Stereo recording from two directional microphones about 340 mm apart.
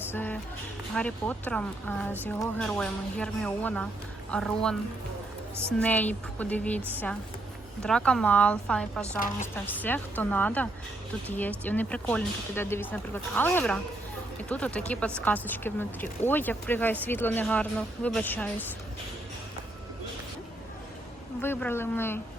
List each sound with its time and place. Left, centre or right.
0.1 s music: centre
0.9 s speech: centre
5.8 s speech: centre
9.1 s a woman's voice: left
9.8 s speech: centre
21.4 s speech: centre